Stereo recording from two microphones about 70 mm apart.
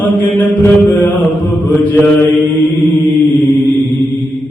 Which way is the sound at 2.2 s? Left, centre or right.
Left.